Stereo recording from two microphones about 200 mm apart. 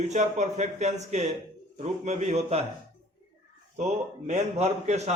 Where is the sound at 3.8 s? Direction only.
35° right (ahead or behind).